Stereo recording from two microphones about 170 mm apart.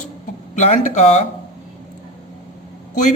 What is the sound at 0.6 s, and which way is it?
Speech, 45° left (ahead or behind).